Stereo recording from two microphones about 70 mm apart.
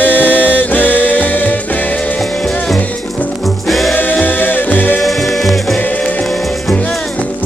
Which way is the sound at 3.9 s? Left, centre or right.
Left.